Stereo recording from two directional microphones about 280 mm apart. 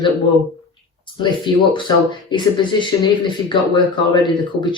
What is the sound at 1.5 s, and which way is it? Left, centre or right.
Speech, centre.